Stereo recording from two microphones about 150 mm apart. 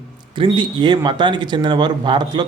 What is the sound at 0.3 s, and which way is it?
Speech, 35° right (ahead or behind).